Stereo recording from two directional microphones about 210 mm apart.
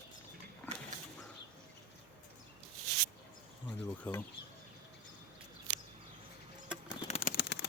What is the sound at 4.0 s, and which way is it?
Speech, 10° left (ahead or behind).